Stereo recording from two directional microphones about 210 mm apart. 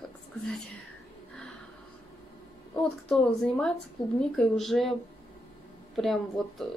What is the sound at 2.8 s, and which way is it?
Speech, 5° left (ahead or behind).